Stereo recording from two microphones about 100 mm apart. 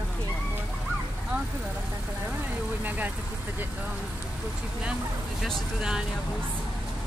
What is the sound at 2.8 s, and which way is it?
Speech, 15° right (ahead or behind).